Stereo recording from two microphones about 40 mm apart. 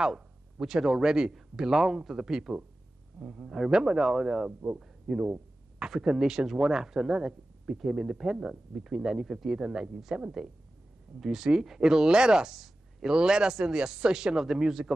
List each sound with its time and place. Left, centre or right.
0.0 s speech: centre
3.6 s a man's voice: centre
8.3 s a man's voice: centre
8.7 s speech: centre